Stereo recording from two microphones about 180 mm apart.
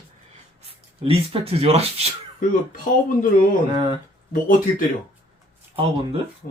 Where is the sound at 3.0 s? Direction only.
50° left (ahead or behind).